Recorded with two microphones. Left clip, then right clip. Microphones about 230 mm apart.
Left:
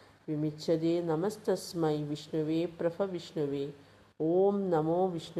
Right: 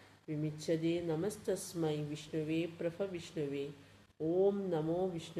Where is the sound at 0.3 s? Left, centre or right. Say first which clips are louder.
Left 6 dB; centre.